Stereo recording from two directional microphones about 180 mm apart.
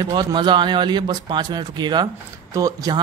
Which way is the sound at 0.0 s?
25° right (ahead or behind).